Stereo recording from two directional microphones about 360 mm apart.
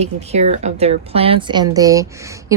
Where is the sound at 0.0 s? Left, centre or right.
Centre.